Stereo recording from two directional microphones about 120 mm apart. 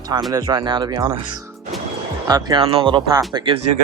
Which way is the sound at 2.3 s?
30° right (ahead or behind).